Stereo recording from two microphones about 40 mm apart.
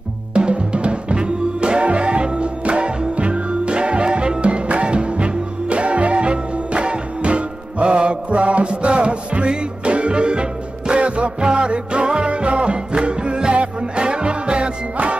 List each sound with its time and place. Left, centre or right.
0.3 s music: right